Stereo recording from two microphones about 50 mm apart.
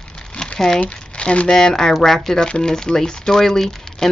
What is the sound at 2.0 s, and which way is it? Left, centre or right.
Speech, centre.